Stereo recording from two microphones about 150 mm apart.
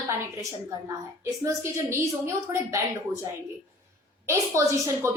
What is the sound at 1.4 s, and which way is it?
Speech, 15° right (ahead or behind).